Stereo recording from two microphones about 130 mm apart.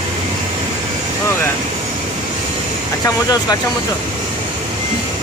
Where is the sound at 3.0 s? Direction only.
25° left (ahead or behind).